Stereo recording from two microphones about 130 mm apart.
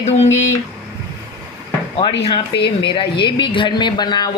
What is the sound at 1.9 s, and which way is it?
A woman's voice, 45° left (ahead or behind).